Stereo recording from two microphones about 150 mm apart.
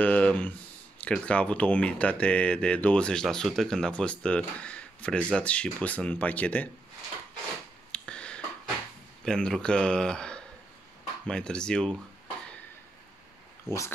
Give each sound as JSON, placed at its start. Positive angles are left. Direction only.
{"t": 0.0, "sound": "speech", "side_deg": 10}
{"t": 7.9, "sound": "a sound", "side_deg": 5}
{"t": 9.2, "sound": "speech", "side_deg": 5}
{"t": 13.7, "sound": "speech", "side_deg": 20}